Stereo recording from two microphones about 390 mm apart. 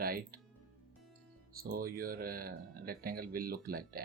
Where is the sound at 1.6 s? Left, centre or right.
Right.